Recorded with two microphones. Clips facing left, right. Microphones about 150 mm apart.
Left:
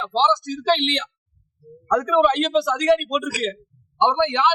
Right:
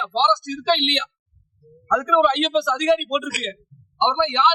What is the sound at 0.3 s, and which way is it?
Speech, 35° left (ahead or behind).